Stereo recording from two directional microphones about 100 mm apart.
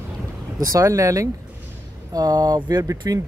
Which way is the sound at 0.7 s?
30° right (ahead or behind).